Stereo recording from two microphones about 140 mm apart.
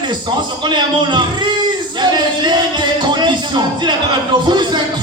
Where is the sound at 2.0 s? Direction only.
30° right (ahead or behind).